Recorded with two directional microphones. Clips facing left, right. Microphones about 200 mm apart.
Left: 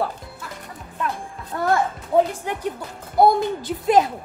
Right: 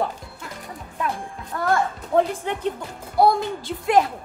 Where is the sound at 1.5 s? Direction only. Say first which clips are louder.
Left 2 dB; 25° left (ahead or behind).